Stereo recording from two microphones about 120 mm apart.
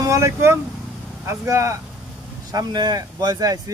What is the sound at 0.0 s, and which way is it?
Speech, 25° right (ahead or behind).